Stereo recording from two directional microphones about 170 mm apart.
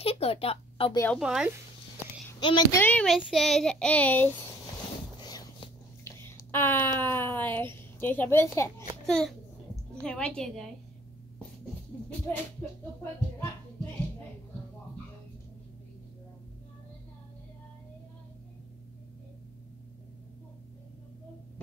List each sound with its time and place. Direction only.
0.0 s a sound: 35° left (ahead or behind)
1.1 s a child's voice: 5° right (ahead or behind)
2.4 s speech: 30° left (ahead or behind)
2.8 s a child's voice: 10° left (ahead or behind)
5.2 s whispering: 25° left (ahead or behind)
7.0 s a child's voice: 10° left (ahead or behind)
9.0 s a child's voice: 5° left (ahead or behind)